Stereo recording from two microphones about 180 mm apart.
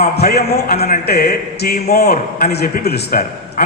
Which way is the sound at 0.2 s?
60° left (ahead or behind).